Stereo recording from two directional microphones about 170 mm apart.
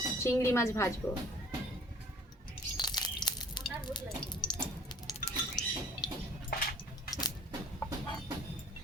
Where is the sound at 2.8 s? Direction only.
25° left (ahead or behind).